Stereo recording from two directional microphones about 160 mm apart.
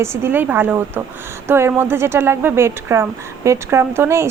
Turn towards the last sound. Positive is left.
turn(degrees=-15)  # may be behind; listen again after turning